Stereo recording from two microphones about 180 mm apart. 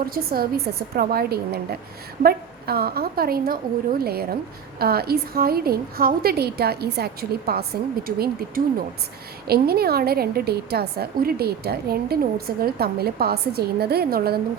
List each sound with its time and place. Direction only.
0.1 s a woman's voice: 55° right (ahead or behind)